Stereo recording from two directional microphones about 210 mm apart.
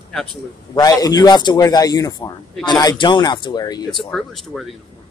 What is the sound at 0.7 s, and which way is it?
Speech, 15° left (ahead or behind).